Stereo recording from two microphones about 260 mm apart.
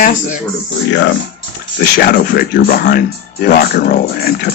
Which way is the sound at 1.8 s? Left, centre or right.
Left.